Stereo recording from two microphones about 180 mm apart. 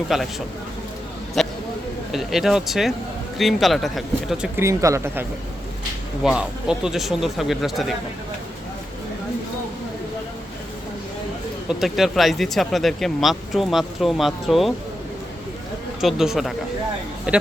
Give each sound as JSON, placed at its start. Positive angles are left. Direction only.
{"t": 0.1, "sound": "speech", "side_deg": 0}
{"t": 1.4, "sound": "a sound", "side_deg": 0}
{"t": 2.1, "sound": "speech", "side_deg": 0}
{"t": 4.6, "sound": "speech", "side_deg": -15}
{"t": 6.2, "sound": "speech", "side_deg": -5}
{"t": 11.7, "sound": "speech", "side_deg": 0}
{"t": 16.0, "sound": "speech", "side_deg": 0}